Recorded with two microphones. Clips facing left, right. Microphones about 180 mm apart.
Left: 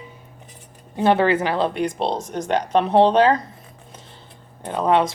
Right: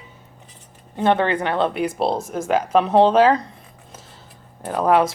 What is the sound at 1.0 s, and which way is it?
Speech, 10° left (ahead or behind).